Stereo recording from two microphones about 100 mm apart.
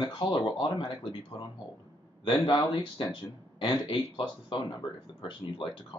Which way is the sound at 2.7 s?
45° left (ahead or behind).